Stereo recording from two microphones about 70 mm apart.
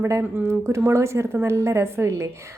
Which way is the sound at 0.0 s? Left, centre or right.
Right.